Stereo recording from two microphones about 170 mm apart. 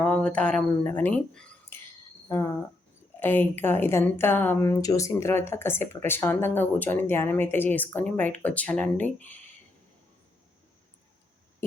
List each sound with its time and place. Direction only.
0.0 s speech: 5° left (ahead or behind)